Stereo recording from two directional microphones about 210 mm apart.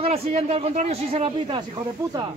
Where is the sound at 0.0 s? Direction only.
30° right (ahead or behind).